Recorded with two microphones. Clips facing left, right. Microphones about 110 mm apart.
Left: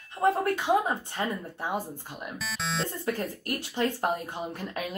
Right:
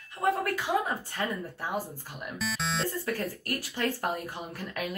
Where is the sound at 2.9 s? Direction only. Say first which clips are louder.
Left 1 dB; 20° left (ahead or behind).